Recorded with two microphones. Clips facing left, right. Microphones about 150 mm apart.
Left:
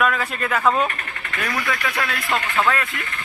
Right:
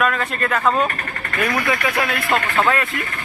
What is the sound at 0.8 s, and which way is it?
Speech, 40° right (ahead or behind).